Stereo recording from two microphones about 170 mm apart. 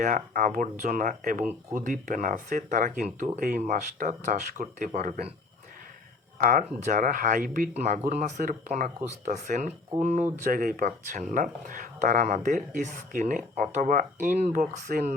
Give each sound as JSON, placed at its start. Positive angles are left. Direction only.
{"t": 0.0, "sound": "speech", "side_deg": -50}
{"t": 6.4, "sound": "speech", "side_deg": -50}
{"t": 7.7, "sound": "speech", "side_deg": -40}
{"t": 10.4, "sound": "speech", "side_deg": -55}